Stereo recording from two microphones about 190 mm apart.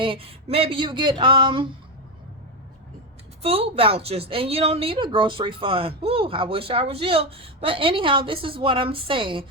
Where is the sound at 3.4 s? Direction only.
30° right (ahead or behind).